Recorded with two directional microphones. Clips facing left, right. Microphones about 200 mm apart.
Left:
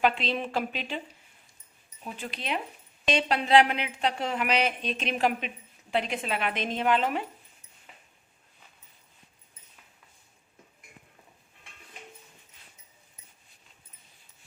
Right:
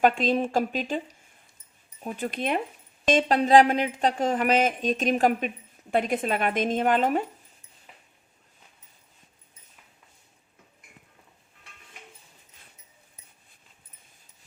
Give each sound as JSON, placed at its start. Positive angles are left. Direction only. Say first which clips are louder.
{"t": 0.0, "sound": "speech", "louder": "right 5 dB", "side_deg": -45}
{"t": 2.0, "sound": "speech", "louder": "right 6 dB", "side_deg": -50}